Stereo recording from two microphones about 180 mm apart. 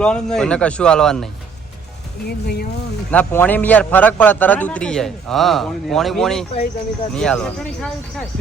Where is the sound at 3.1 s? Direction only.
10° left (ahead or behind).